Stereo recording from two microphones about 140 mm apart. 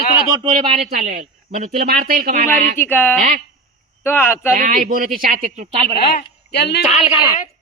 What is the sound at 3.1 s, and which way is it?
Speech, 60° right (ahead or behind).